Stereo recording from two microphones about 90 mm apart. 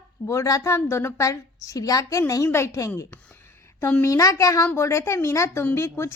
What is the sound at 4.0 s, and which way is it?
A woman's voice, 35° left (ahead or behind).